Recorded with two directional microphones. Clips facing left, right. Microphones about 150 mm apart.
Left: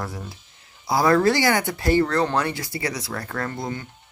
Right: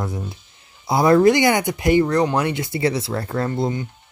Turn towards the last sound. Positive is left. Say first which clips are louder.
# right 6 dB
turn(degrees=-20)  # may be behind; listen again after turning